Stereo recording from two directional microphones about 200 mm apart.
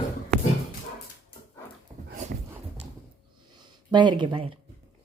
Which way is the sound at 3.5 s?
20° right (ahead or behind).